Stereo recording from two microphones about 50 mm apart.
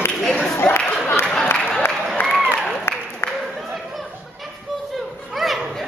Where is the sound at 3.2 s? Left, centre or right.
Left.